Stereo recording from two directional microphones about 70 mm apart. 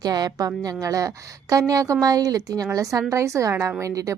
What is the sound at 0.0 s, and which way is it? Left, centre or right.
A woman's voice, right.